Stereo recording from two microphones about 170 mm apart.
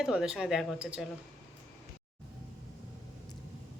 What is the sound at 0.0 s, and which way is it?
Speech, 5° right (ahead or behind).